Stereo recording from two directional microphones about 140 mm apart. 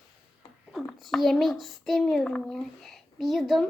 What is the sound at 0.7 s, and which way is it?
A child's voice, centre (ahead or behind).